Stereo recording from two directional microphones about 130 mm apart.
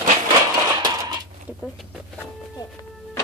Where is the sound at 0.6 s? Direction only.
30° right (ahead or behind).